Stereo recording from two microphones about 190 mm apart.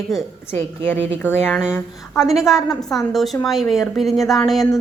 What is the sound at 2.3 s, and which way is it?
A woman's voice, centre (ahead or behind).